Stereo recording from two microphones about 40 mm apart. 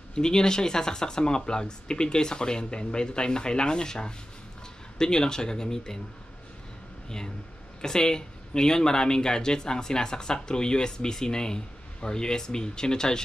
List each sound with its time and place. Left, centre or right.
0.1 s speech: centre
7.8 s speech: centre